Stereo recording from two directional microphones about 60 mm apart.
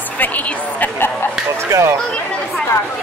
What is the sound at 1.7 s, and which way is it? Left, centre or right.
Speech, right.